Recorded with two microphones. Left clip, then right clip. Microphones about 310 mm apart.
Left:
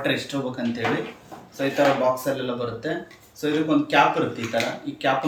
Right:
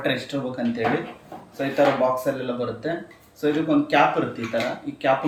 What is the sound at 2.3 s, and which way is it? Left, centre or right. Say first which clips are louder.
A man's voice: even; centre.